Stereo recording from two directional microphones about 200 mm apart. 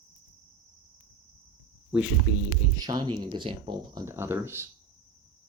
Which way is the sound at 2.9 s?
20° right (ahead or behind).